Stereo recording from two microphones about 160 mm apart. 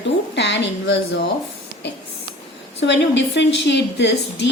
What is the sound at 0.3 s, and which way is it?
Speech, 90° left.